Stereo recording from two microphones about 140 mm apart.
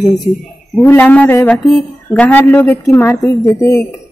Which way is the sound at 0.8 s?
15° left (ahead or behind).